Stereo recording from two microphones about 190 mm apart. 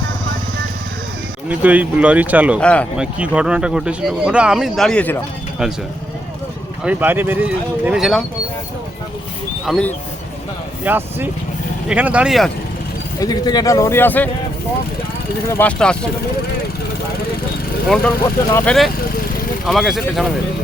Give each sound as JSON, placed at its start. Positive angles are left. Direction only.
{"t": 1.5, "sound": "speech", "side_deg": -10}
{"t": 2.6, "sound": "speech", "side_deg": 5}
{"t": 3.0, "sound": "speech", "side_deg": -5}
{"t": 6.8, "sound": "speech", "side_deg": -10}
{"t": 9.6, "sound": "speech", "side_deg": 5}
{"t": 10.8, "sound": "speech", "side_deg": -10}
{"t": 13.1, "sound": "speech", "side_deg": 20}
{"t": 15.4, "sound": "speech", "side_deg": 10}
{"t": 17.8, "sound": "speech", "side_deg": 5}